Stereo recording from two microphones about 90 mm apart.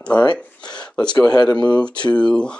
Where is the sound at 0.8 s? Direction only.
10° left (ahead or behind).